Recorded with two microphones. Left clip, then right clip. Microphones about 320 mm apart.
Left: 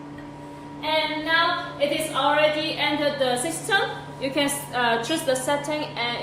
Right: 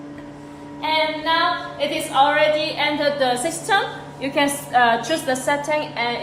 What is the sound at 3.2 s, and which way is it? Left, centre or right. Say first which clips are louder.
A woman's voice: right 4 dB; right.